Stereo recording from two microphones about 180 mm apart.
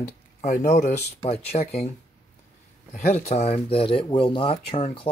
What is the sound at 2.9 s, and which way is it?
Speech, 40° left (ahead or behind).